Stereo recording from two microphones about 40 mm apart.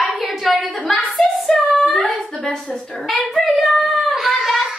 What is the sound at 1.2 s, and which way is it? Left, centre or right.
Female singing, centre.